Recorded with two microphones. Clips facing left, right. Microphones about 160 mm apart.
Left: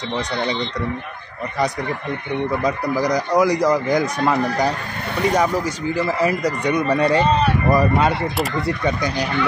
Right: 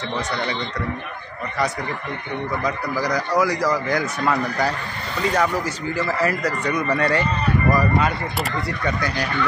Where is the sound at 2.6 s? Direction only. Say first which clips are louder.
Left 4 dB; 20° left (ahead or behind).